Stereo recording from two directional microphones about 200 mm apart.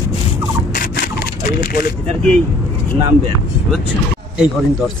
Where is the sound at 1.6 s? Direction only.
45° left (ahead or behind).